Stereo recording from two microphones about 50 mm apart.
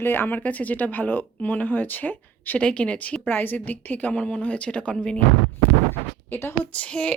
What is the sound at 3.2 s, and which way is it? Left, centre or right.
Speech, left.